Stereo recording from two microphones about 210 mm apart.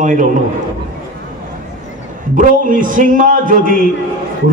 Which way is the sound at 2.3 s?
40° right (ahead or behind).